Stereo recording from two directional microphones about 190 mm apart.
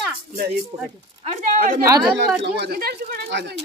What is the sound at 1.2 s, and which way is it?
Speech, 40° right (ahead or behind).